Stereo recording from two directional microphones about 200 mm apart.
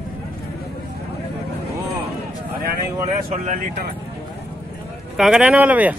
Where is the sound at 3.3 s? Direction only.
35° right (ahead or behind).